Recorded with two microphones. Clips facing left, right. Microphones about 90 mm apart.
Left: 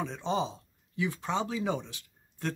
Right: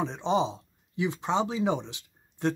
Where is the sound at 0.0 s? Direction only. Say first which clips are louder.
Right 5 dB; 20° right (ahead or behind).